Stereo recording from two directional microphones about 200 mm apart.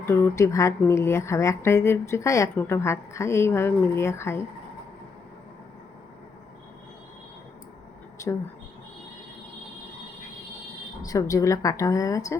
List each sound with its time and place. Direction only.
0.0 s speech: 15° left (ahead or behind)
8.2 s a sound: 15° left (ahead or behind)
11.0 s speech: 15° left (ahead or behind)